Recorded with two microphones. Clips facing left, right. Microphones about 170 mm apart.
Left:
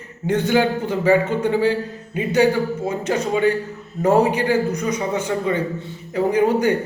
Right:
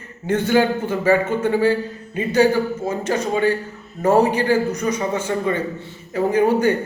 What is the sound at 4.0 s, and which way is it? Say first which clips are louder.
A man's voice: even; 15° left (ahead or behind).